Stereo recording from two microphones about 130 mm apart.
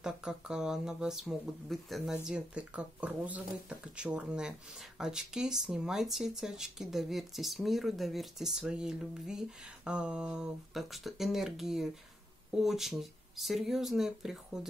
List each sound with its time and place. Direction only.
0.0 s speech: 5° right (ahead or behind)